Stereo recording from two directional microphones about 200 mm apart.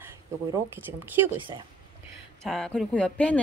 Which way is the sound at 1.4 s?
25° right (ahead or behind).